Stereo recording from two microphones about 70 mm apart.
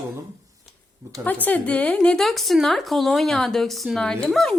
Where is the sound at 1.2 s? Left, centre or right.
Left.